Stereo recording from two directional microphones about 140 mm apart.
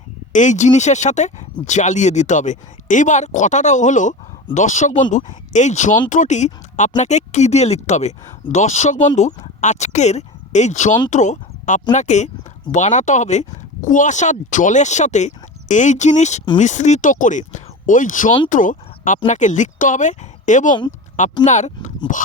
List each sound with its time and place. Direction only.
0.3 s speech: 60° left (ahead or behind)